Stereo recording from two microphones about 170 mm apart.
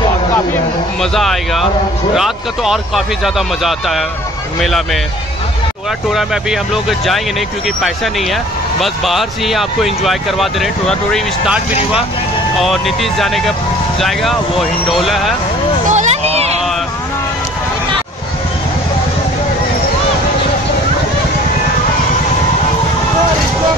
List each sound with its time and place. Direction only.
1.1 s speech: centre (ahead or behind)
6.1 s speech: 5° right (ahead or behind)
15.9 s a sound: 40° right (ahead or behind)